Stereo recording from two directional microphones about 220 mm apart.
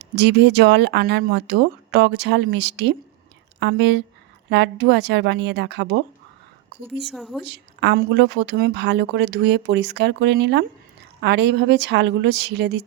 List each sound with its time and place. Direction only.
0.2 s speech: 50° right (ahead or behind)
7.0 s speech: centre (ahead or behind)
7.4 s speech: 50° right (ahead or behind)